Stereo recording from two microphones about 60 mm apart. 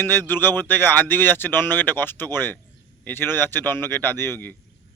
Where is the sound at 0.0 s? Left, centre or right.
Left.